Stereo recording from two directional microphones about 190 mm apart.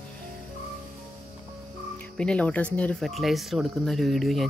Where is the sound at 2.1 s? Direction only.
5° left (ahead or behind).